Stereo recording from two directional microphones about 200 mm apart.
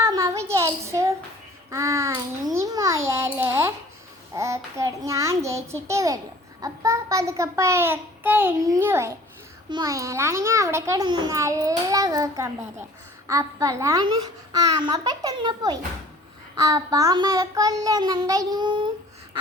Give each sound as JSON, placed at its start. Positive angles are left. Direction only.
{"t": 0.0, "sound": "a sound", "side_deg": -15}
{"t": 1.7, "sound": "a child's voice", "side_deg": -15}
{"t": 4.4, "sound": "a child's voice", "side_deg": -15}